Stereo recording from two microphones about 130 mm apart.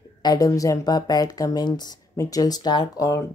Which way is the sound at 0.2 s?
30° left (ahead or behind).